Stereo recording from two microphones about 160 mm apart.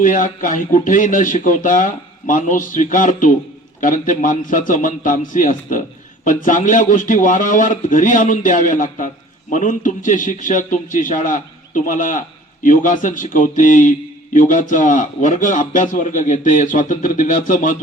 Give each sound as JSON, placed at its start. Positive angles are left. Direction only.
{"t": 0.0, "sound": "a man's voice", "side_deg": 55}